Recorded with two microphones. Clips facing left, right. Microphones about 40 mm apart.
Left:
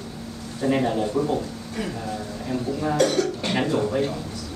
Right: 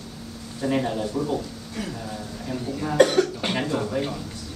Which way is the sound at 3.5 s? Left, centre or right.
Centre.